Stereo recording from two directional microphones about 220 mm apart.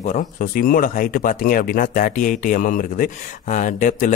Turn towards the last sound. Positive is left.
turn(degrees=35)  # may be behind; listen again after turning